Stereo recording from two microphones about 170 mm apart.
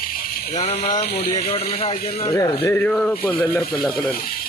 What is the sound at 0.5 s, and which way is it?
Speech, 40° left (ahead or behind).